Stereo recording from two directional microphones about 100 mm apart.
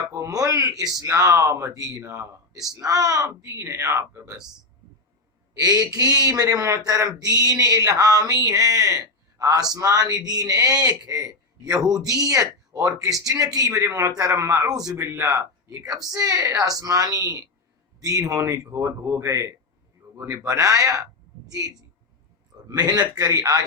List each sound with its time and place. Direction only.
0.1 s a sound: 30° right (ahead or behind)
1.0 s a man's voice: 35° right (ahead or behind)
5.5 s a man's voice: 35° right (ahead or behind)
14.9 s a man's voice: 25° right (ahead or behind)
22.7 s a man's voice: 40° right (ahead or behind)